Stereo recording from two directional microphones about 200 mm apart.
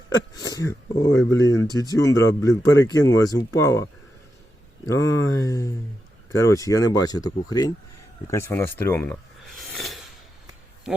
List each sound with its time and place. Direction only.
0.1 s speech: 20° left (ahead or behind)
4.9 s speech: 15° left (ahead or behind)
9.6 s a sound: centre (ahead or behind)